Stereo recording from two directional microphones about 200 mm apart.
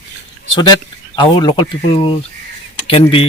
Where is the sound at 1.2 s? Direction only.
20° left (ahead or behind).